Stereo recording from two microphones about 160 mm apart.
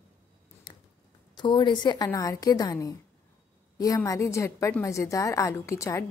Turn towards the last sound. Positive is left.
turn(degrees=20)  # may be behind; listen again after turning